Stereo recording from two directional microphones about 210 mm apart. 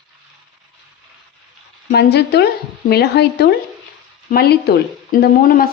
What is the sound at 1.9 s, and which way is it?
Speech, 50° left (ahead or behind).